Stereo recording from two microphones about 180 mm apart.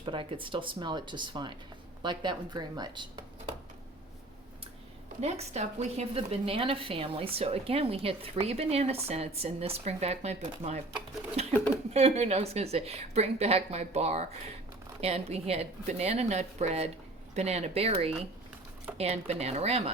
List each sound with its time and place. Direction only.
0.0 s speech: 30° right (ahead or behind)
5.2 s speech: 35° right (ahead or behind)
11.4 s a sound: 35° right (ahead or behind)
11.9 s speech: 35° right (ahead or behind)